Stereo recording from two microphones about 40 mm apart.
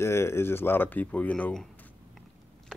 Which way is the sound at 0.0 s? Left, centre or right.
Left.